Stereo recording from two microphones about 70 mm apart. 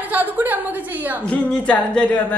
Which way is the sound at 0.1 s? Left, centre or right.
Right.